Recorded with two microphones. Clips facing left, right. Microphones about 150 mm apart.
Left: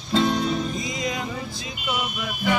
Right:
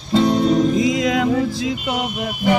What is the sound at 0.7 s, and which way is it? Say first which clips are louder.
Music: right 11 dB; 90° right.